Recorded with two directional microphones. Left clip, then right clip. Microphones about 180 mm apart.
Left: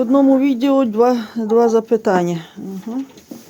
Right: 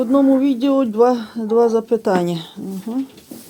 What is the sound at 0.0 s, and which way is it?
Speech, 15° left (ahead or behind).